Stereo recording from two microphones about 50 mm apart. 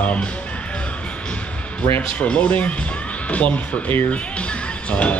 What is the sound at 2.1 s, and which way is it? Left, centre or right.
Speech, left.